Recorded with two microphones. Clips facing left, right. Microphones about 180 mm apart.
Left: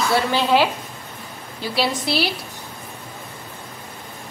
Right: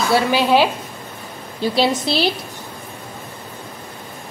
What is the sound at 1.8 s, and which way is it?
Speech, 25° right (ahead or behind).